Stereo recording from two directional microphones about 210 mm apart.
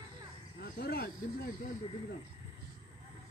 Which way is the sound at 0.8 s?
50° left (ahead or behind).